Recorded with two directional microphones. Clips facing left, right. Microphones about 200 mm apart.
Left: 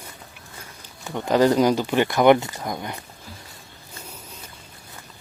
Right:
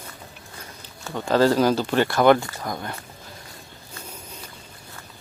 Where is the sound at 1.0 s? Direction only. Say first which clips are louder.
Left 1 dB; 15° left (ahead or behind).